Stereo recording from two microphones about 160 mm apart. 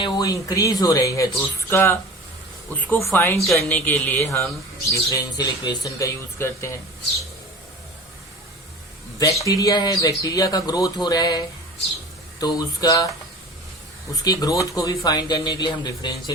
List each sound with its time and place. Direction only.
0.0 s a man's voice: 25° left (ahead or behind)
9.4 s speech: 20° left (ahead or behind)
14.3 s speech: 20° left (ahead or behind)